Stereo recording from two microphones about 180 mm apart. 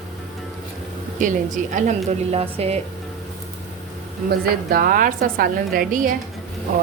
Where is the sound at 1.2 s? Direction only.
45° right (ahead or behind).